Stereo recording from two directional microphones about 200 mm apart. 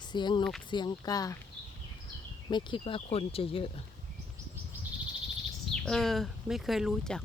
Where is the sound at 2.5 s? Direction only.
25° left (ahead or behind).